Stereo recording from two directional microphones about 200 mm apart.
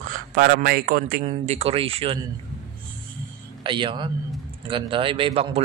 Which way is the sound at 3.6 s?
25° right (ahead or behind).